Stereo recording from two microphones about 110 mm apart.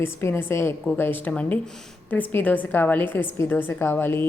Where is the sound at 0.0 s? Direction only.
25° left (ahead or behind).